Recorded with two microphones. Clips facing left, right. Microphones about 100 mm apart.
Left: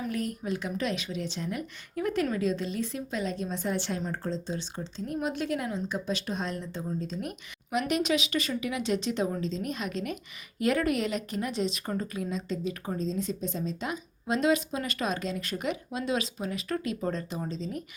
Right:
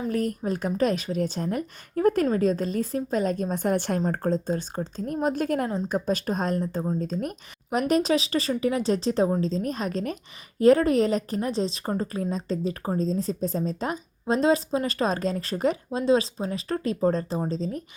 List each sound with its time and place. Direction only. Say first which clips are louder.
0.1 s a woman's voice: right 5 dB; 40° right (ahead or behind)